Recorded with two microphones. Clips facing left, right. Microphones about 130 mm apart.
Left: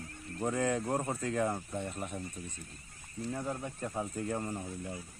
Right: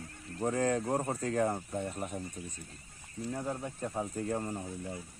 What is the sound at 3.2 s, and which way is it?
Speech, 10° right (ahead or behind).